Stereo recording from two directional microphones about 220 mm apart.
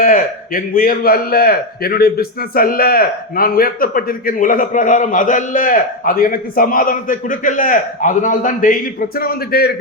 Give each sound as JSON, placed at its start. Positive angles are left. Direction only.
{"t": 0.0, "sound": "a man's voice", "side_deg": 40}